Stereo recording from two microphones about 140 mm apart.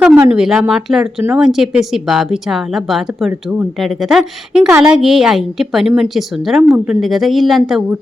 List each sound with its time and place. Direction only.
0.3 s speech: 5° right (ahead or behind)